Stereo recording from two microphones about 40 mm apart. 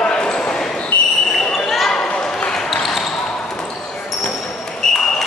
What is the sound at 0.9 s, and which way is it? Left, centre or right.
Basketball bounce, left.